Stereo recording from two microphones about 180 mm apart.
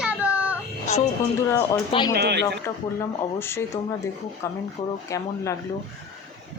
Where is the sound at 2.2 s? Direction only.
65° right (ahead or behind).